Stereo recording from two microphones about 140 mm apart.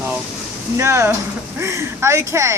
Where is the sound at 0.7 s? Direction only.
20° right (ahead or behind).